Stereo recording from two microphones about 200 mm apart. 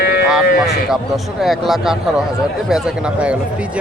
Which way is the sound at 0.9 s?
Centre (ahead or behind).